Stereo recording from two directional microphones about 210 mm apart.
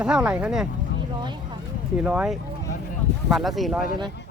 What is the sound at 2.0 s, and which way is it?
Speech, 5° right (ahead or behind).